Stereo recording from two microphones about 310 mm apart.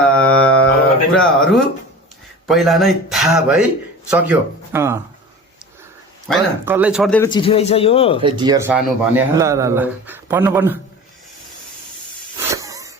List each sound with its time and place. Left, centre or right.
0.0 s mantra: centre
1.1 s a man's voice: centre
6.2 s speech: centre
7.3 s speech: centre
8.2 s a man's voice: centre
12.5 s vehicle: centre